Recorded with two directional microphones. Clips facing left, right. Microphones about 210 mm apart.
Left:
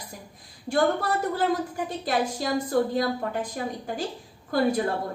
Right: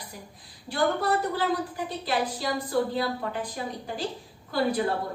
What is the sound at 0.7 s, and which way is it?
A woman's voice, 50° left (ahead or behind).